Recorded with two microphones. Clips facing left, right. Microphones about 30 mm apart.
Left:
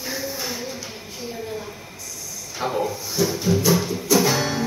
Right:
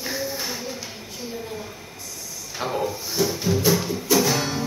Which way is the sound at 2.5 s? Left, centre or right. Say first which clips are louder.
Left 2 dB; centre.